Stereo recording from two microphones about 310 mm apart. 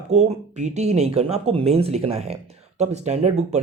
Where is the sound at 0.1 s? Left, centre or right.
Right.